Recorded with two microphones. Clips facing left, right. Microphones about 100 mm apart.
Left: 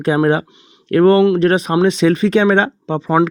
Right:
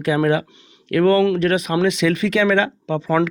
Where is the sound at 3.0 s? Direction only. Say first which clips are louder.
Left 4 dB; 20° left (ahead or behind).